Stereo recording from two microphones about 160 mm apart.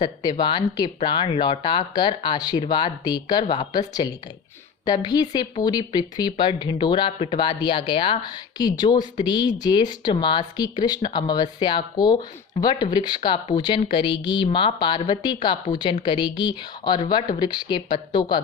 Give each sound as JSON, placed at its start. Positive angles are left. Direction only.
{"t": 0.0, "sound": "speech", "side_deg": 25}